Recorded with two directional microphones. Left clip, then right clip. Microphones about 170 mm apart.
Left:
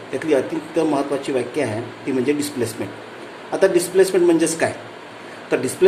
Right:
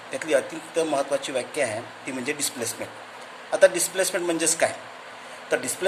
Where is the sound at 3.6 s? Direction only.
30° right (ahead or behind).